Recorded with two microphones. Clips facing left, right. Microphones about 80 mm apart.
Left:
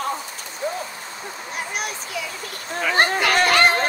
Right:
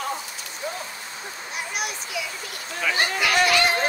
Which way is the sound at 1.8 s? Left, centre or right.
Left.